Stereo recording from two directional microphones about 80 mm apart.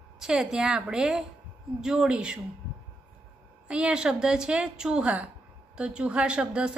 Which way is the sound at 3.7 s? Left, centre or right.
Centre.